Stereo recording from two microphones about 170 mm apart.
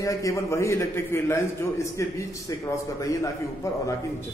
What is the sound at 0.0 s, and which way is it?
A man's voice, 20° left (ahead or behind).